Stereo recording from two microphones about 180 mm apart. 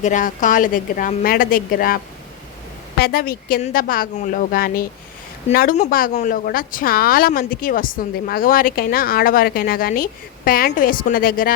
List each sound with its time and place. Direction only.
0.0 s speech: 45° left (ahead or behind)
3.0 s speech: 55° left (ahead or behind)